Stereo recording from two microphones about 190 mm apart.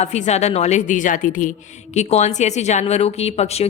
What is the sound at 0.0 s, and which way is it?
A woman's voice, 35° left (ahead or behind).